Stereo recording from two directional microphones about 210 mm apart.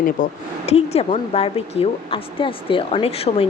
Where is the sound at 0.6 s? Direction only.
30° left (ahead or behind).